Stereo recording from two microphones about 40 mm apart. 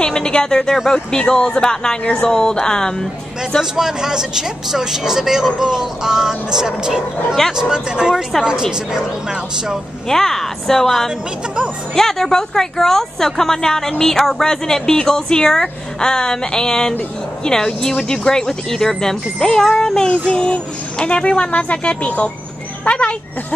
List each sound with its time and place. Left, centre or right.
0.0 s speech: left
1.1 s child singing: left
2.1 s a woman's voice: centre
3.7 s speech: centre
10.0 s a woman's voice: centre
20.1 s child singing: left
20.5 s speech: left
22.8 s child singing: left